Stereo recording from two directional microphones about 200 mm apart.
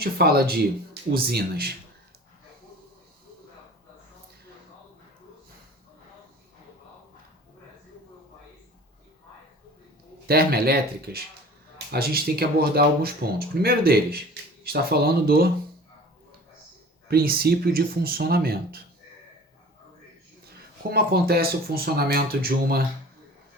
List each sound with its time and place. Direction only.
0.0 s speech: 50° right (ahead or behind)
10.2 s speech: 50° right (ahead or behind)
17.1 s speech: 50° right (ahead or behind)
20.9 s speech: 50° right (ahead or behind)